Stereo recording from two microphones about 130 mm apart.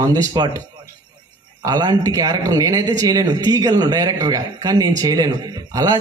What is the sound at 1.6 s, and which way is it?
A man's voice, 30° right (ahead or behind).